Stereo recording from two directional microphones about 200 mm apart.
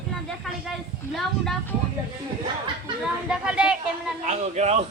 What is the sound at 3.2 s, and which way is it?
Speech, 5° right (ahead or behind).